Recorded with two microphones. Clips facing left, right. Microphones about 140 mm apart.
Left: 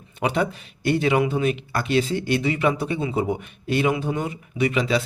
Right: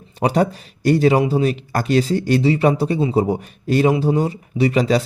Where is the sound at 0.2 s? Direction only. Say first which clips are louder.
Right 5 dB; 40° right (ahead or behind).